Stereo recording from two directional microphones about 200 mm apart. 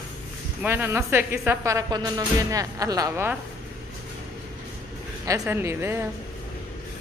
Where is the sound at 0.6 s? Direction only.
10° right (ahead or behind).